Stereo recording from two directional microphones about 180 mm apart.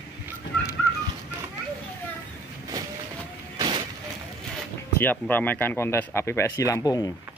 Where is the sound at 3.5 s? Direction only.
25° right (ahead or behind).